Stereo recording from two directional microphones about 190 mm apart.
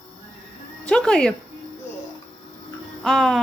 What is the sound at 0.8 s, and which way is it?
Speech, 5° left (ahead or behind).